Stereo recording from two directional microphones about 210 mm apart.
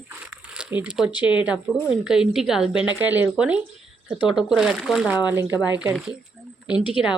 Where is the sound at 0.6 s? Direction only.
5° right (ahead or behind).